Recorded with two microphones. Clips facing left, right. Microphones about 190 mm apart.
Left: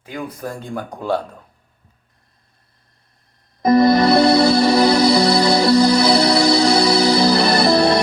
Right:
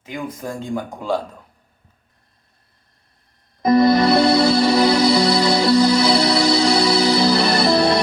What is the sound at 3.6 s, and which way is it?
Music, 40° left (ahead or behind).